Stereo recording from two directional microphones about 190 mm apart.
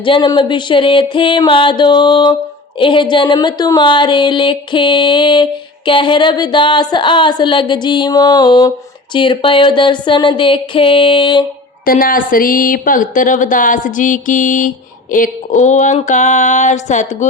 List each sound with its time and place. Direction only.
0.0 s speech: 25° left (ahead or behind)
11.9 s speech: 50° left (ahead or behind)
15.1 s a sound: 40° left (ahead or behind)